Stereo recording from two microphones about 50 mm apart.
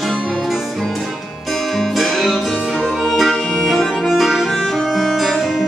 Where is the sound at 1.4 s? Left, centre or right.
Centre.